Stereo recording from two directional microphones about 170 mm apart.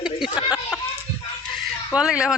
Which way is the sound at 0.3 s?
25° left (ahead or behind).